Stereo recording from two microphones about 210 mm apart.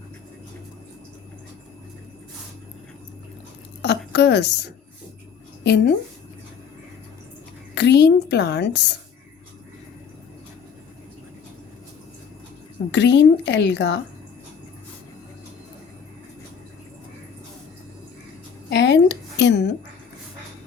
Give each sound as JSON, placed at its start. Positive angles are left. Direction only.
{"t": 3.8, "sound": "a woman's voice", "side_deg": 55}
{"t": 7.8, "sound": "a woman's voice", "side_deg": 55}
{"t": 12.9, "sound": "a woman's voice", "side_deg": 55}
{"t": 18.7, "sound": "a sound", "side_deg": 55}